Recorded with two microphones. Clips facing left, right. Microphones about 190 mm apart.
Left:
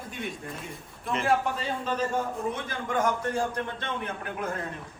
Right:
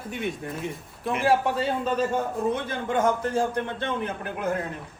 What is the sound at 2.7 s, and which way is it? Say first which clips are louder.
Speech: right 1 dB; 25° right (ahead or behind).